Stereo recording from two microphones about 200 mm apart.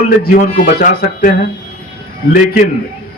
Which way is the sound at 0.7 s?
50° left (ahead or behind).